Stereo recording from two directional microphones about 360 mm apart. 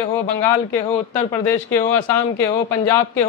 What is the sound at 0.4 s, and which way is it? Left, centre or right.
Speech, centre.